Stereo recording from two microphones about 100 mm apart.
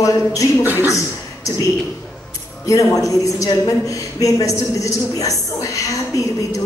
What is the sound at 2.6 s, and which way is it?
A man's voice, 35° left (ahead or behind).